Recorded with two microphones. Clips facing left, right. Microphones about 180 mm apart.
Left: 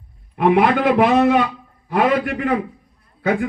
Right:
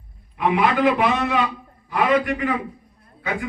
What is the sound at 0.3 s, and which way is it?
A man's voice, 60° left (ahead or behind).